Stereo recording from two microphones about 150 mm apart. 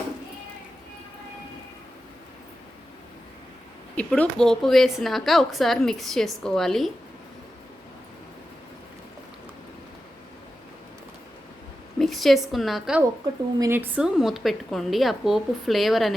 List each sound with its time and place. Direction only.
3.9 s a woman's voice: 5° left (ahead or behind)
11.9 s a woman's voice: centre (ahead or behind)
13.6 s a woman's voice: 15° right (ahead or behind)